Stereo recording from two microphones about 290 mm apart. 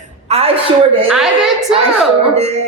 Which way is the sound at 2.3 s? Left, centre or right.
Right.